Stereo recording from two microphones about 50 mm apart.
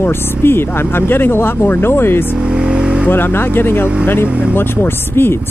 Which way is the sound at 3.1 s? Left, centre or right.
Left.